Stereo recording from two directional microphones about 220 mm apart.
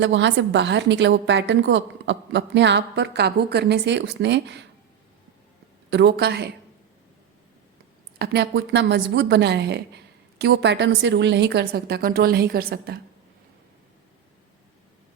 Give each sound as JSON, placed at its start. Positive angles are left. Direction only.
{"t": 0.0, "sound": "a woman's voice", "side_deg": -55}
{"t": 5.9, "sound": "a woman's voice", "side_deg": -50}
{"t": 8.2, "sound": "a woman's voice", "side_deg": -50}